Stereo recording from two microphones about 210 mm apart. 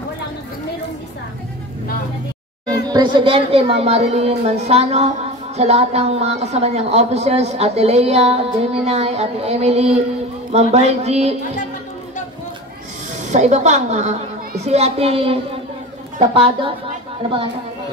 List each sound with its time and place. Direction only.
2.7 s a woman's voice: 20° right (ahead or behind)
13.2 s a woman's voice: 35° right (ahead or behind)